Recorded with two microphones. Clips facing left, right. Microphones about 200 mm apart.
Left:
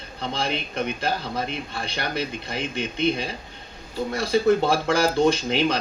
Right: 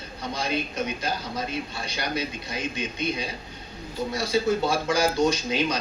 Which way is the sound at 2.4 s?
55° left (ahead or behind).